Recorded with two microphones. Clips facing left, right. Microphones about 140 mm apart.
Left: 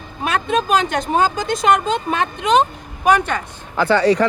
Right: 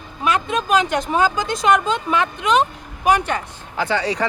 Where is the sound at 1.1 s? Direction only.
50° left (ahead or behind).